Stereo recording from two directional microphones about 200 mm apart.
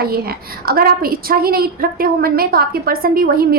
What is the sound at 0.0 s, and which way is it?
A woman's voice, 50° right (ahead or behind).